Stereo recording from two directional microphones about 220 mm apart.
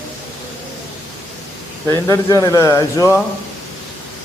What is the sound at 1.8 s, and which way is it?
Speech, 15° left (ahead or behind).